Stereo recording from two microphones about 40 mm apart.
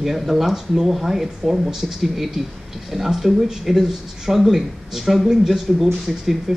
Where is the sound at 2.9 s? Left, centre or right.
Centre.